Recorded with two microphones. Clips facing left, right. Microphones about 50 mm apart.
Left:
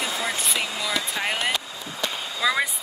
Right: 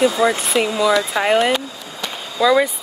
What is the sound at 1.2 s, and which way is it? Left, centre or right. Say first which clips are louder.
Speech: right 11 dB; centre.